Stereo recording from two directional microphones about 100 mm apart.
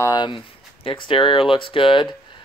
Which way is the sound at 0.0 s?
40° left (ahead or behind).